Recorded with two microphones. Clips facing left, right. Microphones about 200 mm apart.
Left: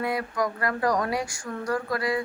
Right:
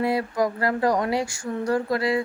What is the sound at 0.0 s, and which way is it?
Speech, 30° right (ahead or behind).